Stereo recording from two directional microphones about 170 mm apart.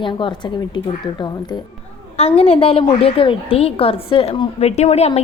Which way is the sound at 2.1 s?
35° left (ahead or behind).